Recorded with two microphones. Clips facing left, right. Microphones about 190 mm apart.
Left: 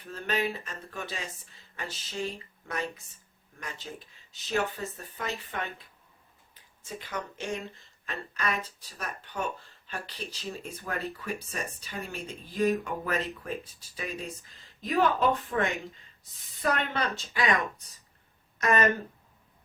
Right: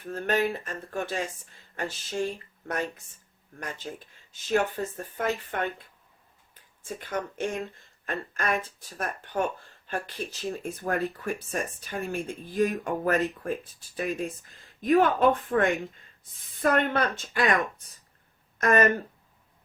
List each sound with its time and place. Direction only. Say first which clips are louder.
0.0 s speech: right 4 dB; 50° right (ahead or behind)
18.6 s speech: right 3 dB; 50° right (ahead or behind)